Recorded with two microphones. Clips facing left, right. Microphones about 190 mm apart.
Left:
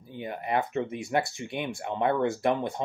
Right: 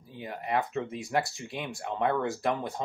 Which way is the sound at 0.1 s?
25° left (ahead or behind).